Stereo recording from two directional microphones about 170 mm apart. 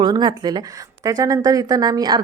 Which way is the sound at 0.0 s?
25° right (ahead or behind).